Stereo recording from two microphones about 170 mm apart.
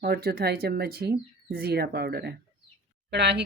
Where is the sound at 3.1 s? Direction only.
85° right.